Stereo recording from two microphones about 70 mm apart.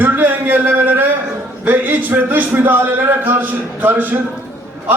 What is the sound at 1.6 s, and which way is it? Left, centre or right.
A man's voice, right.